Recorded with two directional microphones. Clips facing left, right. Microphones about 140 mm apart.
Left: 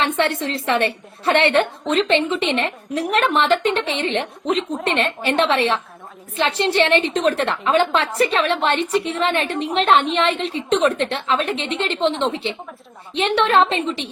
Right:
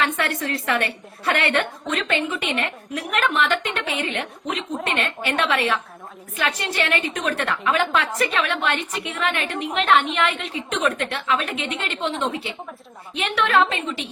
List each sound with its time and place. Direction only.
0.2 s a woman's voice: 25° left (ahead or behind)